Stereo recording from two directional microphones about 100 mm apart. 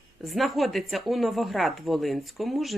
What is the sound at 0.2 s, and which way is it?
Speech, centre (ahead or behind).